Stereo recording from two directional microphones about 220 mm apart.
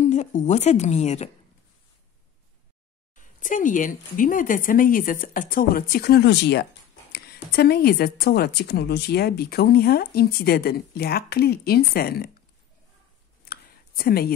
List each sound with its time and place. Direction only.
0.0 s a woman's voice: 35° left (ahead or behind)
3.2 s speech: 35° left (ahead or behind)
13.5 s a sound: 45° left (ahead or behind)